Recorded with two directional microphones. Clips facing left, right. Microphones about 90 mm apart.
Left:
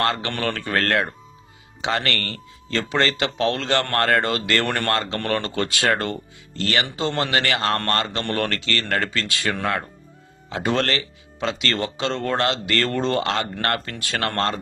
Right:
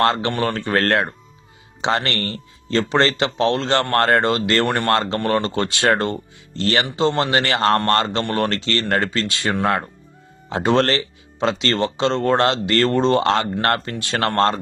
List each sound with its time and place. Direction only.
0.0 s speech: 25° right (ahead or behind)
8.2 s speech: 15° right (ahead or behind)
8.4 s speech: 25° right (ahead or behind)